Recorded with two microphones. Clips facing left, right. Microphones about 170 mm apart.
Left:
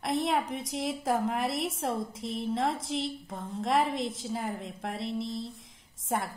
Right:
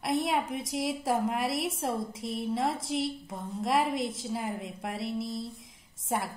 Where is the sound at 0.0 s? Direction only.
Centre (ahead or behind).